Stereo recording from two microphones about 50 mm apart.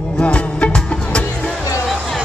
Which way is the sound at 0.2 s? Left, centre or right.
Left.